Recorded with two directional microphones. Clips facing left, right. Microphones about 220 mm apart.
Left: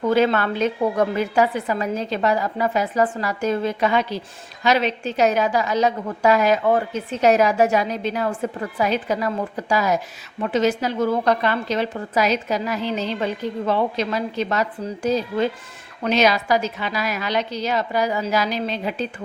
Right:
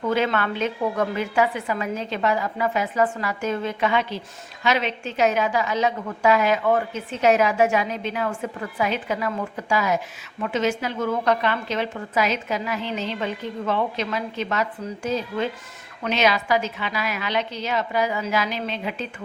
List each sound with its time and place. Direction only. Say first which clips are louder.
0.1 s a woman's voice: left 4 dB; 40° left (ahead or behind)